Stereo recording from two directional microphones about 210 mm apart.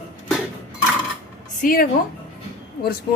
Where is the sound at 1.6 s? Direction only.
40° left (ahead or behind).